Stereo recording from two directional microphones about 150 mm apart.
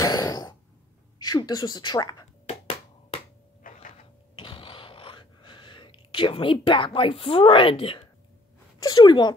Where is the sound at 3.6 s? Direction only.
65° left (ahead or behind).